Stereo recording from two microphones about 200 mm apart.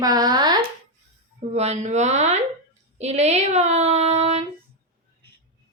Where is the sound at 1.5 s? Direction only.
35° right (ahead or behind).